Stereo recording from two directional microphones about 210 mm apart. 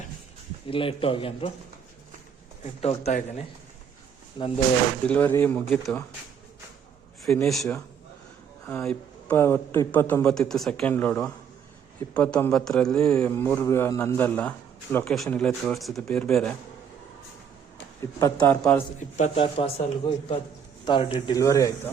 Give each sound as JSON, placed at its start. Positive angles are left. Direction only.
{"t": 0.7, "sound": "speech", "side_deg": 25}
{"t": 2.8, "sound": "speech", "side_deg": 30}
{"t": 5.0, "sound": "a man's voice", "side_deg": 10}
{"t": 7.3, "sound": "a man's voice", "side_deg": 0}
{"t": 18.2, "sound": "a man's voice", "side_deg": 15}
{"t": 19.1, "sound": "speech", "side_deg": 30}